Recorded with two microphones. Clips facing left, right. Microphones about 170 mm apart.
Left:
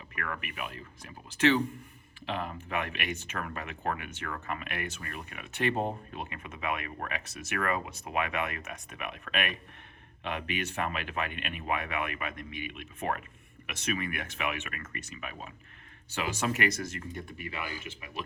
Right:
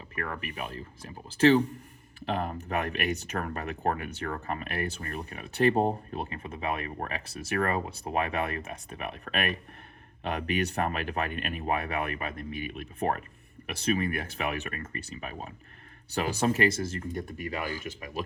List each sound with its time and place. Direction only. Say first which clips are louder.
0.2 s speech: right 2 dB; 35° right (ahead or behind)
17.2 s speech: right 6 dB; 40° right (ahead or behind)